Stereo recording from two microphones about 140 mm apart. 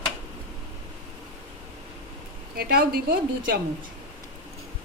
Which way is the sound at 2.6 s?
90° right.